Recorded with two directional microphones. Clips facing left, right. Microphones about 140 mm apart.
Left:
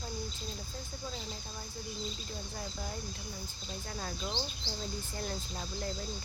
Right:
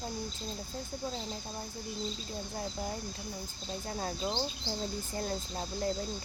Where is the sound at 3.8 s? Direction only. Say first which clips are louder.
Right 5 dB; 30° right (ahead or behind).